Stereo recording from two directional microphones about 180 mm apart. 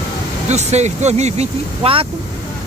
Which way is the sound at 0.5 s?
40° right (ahead or behind).